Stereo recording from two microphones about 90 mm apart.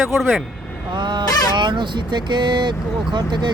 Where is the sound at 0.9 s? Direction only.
60° right (ahead or behind).